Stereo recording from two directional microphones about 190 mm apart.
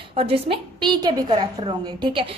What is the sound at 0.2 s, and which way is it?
A woman's voice, 30° right (ahead or behind).